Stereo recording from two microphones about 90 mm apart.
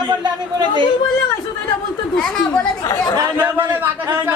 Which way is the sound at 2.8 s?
40° left (ahead or behind).